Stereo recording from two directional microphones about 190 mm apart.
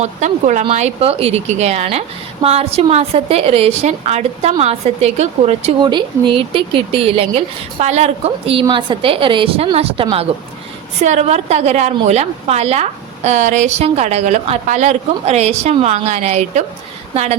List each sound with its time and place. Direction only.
0.0 s speech: 40° right (ahead or behind)